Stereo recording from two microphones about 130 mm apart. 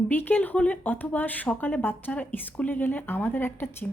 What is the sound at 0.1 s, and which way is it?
A woman's voice, 15° left (ahead or behind).